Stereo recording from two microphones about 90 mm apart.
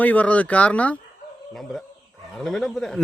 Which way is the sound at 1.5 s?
Centre (ahead or behind).